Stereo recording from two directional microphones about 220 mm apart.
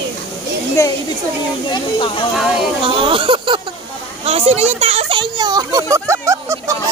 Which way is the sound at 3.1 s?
25° right (ahead or behind).